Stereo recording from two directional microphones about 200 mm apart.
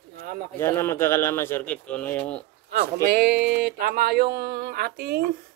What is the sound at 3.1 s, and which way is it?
Speech, 55° right (ahead or behind).